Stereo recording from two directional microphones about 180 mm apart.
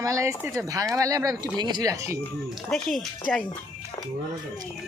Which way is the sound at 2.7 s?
Centre (ahead or behind).